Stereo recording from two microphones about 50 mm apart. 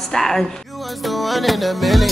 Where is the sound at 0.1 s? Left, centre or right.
Centre.